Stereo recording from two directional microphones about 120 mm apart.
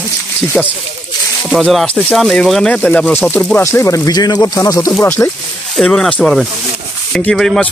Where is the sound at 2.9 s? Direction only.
15° left (ahead or behind).